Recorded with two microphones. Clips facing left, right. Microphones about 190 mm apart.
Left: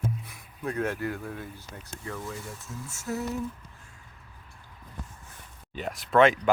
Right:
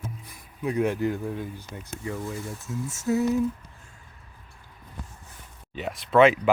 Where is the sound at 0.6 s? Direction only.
10° right (ahead or behind).